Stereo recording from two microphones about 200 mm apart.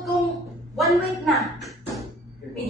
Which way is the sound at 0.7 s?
Centre (ahead or behind).